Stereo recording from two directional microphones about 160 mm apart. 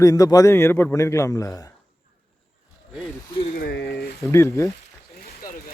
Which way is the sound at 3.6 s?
90° left.